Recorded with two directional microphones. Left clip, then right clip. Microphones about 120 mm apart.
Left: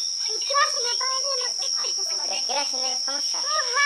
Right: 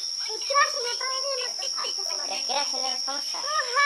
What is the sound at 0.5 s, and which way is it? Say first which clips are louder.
Child singing: even; 35° left (ahead or behind).